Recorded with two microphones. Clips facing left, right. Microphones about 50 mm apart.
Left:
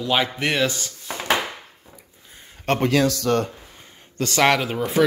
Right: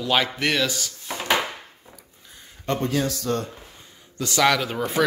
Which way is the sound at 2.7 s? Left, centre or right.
Left.